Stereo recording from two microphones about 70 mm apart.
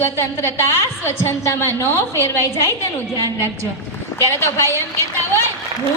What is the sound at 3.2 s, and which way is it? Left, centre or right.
Speech, right.